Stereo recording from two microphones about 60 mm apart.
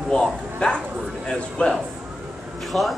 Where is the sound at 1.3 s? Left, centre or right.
Centre.